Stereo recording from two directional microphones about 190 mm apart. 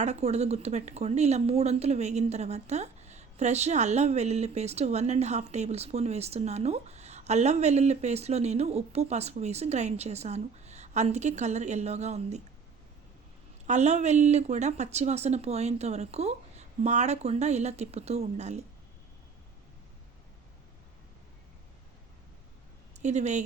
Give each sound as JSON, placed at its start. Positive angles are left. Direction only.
{"t": 0.0, "sound": "speech", "side_deg": -35}
{"t": 13.7, "sound": "speech", "side_deg": -35}
{"t": 23.0, "sound": "speech", "side_deg": -35}